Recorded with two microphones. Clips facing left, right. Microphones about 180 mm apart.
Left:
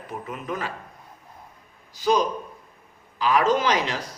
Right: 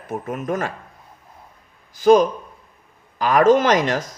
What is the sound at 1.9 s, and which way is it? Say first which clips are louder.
A man's voice: right 8 dB; 50° right (ahead or behind).